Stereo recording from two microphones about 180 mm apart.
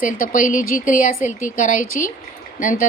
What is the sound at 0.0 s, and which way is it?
Speech, 50° left (ahead or behind).